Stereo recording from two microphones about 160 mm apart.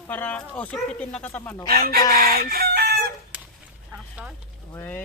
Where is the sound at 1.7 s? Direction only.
65° right (ahead or behind).